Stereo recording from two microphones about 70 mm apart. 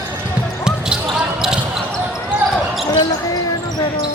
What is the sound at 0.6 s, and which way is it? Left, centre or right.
Basketball bounce, centre.